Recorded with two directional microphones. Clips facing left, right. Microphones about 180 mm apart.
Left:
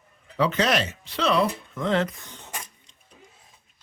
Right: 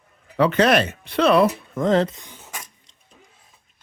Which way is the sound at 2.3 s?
5° right (ahead or behind).